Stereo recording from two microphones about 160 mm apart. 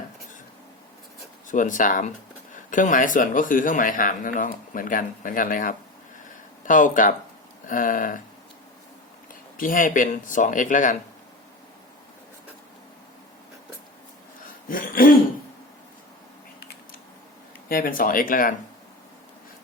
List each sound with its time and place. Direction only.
1.5 s a man's voice: 55° left (ahead or behind)
9.6 s a man's voice: 60° left (ahead or behind)
14.7 s throat clearing: 60° left (ahead or behind)
17.7 s a man's voice: 65° left (ahead or behind)